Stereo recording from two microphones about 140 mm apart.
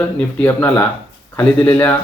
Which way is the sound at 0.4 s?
15° left (ahead or behind).